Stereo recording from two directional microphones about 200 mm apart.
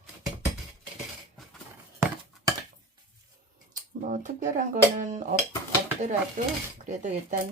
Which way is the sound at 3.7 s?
40° right (ahead or behind).